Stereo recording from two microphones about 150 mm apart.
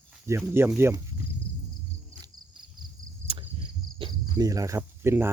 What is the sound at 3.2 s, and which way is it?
Cricket, 35° right (ahead or behind).